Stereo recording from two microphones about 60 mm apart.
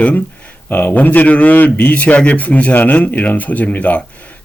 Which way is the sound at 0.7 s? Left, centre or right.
Left.